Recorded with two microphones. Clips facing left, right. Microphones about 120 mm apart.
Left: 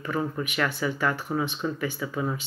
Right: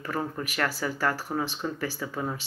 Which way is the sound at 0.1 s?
35° right (ahead or behind).